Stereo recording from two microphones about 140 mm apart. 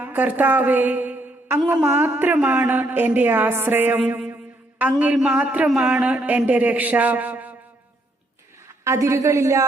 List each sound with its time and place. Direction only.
0.0 s a woman's voice: 15° right (ahead or behind)
8.8 s a woman's voice: 20° right (ahead or behind)